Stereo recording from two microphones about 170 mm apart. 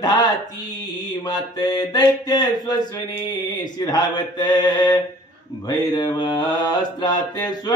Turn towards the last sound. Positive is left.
turn(degrees=25)  # may be behind; listen again after turning